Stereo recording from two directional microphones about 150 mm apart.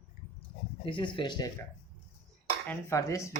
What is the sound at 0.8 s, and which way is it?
Speech, 35° left (ahead or behind).